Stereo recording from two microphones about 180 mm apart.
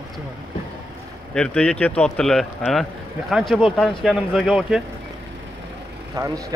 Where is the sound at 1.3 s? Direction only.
5° left (ahead or behind).